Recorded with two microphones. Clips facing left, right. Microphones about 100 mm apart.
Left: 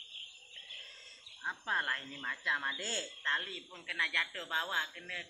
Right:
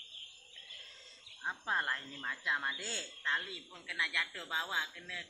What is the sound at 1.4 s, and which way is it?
Speech, 15° right (ahead or behind).